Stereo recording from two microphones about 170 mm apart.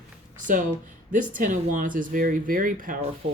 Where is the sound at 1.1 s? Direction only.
50° right (ahead or behind).